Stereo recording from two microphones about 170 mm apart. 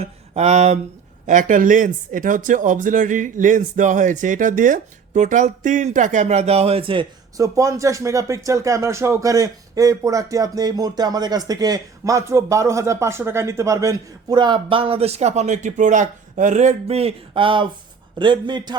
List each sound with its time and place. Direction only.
0.0 s a man's voice: 40° right (ahead or behind)